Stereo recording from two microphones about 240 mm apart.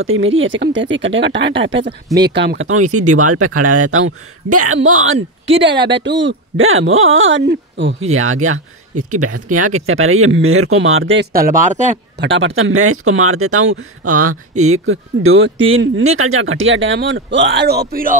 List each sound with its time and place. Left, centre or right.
0.0 s speech: right
11.3 s speech: right
12.2 s speech: right